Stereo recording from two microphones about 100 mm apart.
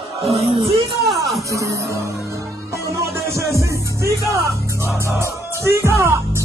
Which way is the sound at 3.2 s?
30° right (ahead or behind).